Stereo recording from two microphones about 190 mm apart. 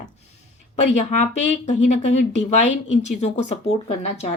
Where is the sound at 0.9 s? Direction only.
40° left (ahead or behind).